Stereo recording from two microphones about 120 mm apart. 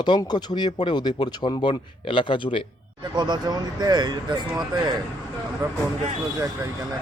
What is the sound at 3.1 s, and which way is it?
Speech, 35° right (ahead or behind).